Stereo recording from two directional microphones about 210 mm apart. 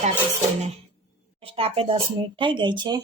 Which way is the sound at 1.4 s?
25° right (ahead or behind).